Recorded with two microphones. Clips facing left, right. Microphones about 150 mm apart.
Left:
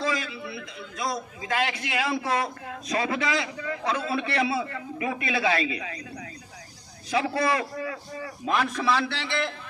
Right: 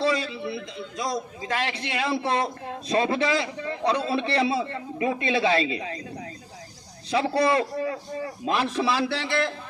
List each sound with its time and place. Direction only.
0.0 s a man's voice: 30° right (ahead or behind)
7.1 s a man's voice: 30° right (ahead or behind)